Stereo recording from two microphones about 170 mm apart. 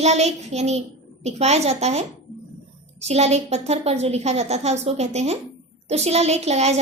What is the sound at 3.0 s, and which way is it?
A woman's voice, 40° right (ahead or behind).